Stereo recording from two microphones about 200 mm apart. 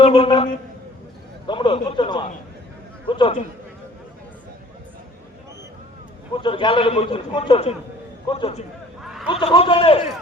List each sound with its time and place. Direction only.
0.0 s a man's voice: 25° left (ahead or behind)
6.4 s a man's voice: 25° left (ahead or behind)
9.0 s a sound: centre (ahead or behind)
9.3 s a man's voice: 30° left (ahead or behind)